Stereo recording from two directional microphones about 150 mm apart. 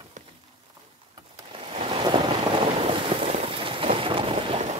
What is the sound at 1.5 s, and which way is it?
Boat, 35° right (ahead or behind).